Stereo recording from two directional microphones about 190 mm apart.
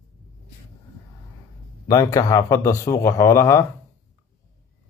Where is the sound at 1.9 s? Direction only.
15° left (ahead or behind).